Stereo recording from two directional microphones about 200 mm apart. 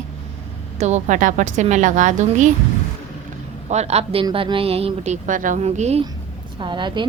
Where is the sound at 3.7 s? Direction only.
35° right (ahead or behind).